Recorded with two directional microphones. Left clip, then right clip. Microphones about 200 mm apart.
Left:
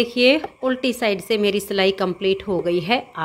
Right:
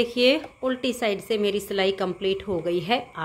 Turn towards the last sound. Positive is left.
turn(degrees=20)  # may be behind; listen again after turning